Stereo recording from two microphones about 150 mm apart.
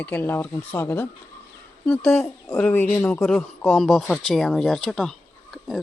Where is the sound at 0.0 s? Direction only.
15° left (ahead or behind).